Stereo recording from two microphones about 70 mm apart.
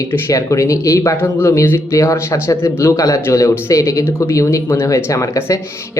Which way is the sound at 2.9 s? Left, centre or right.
Left.